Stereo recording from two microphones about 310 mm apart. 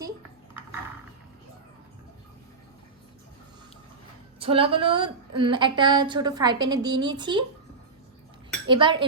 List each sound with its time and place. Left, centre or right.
4.4 s a woman's voice: centre
8.6 s a woman's voice: centre